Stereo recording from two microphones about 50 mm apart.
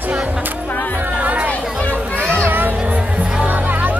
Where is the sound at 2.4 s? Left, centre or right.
Right.